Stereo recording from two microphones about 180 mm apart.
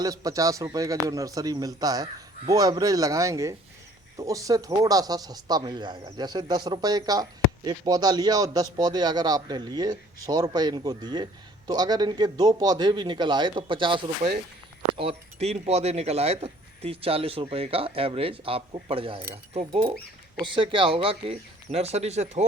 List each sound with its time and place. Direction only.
0.0 s speech: 20° right (ahead or behind); by 22.4 s 35° right (ahead or behind)